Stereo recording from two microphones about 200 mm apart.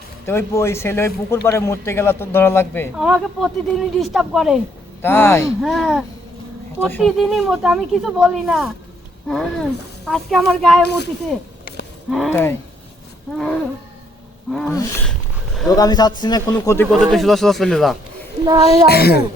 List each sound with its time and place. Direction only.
0.3 s a man's voice: 15° left (ahead or behind)
2.9 s speech: centre (ahead or behind)
5.0 s a man's voice: 10° left (ahead or behind)
5.6 s a man's voice: centre (ahead or behind)
10.8 s speech: 55° left (ahead or behind)
12.1 s a man's voice: 5° left (ahead or behind)
15.7 s a man's voice: 20° left (ahead or behind)
16.6 s a man's voice: 10° left (ahead or behind)
18.9 s a woman's voice: 50° left (ahead or behind)